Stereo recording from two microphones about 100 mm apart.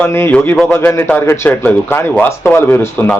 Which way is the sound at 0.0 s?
20° left (ahead or behind).